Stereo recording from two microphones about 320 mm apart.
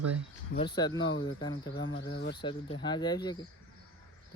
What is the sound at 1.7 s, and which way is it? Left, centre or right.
Speech, left.